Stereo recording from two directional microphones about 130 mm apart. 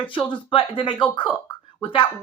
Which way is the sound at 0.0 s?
40° left (ahead or behind).